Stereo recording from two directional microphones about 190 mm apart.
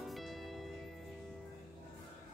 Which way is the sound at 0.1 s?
Centre (ahead or behind).